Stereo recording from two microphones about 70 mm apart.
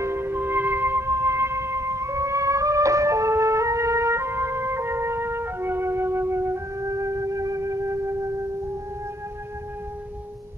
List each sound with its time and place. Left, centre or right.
0.0 s music: right
6.9 s music: right